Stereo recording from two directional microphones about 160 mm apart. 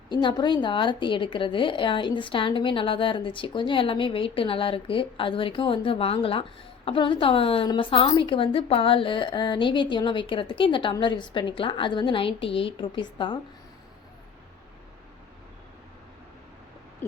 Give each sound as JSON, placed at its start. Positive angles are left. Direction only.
{"t": 0.1, "sound": "speech", "side_deg": 30}
{"t": 17.0, "sound": "owl", "side_deg": 15}